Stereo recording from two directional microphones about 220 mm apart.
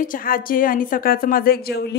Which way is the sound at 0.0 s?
40° left (ahead or behind).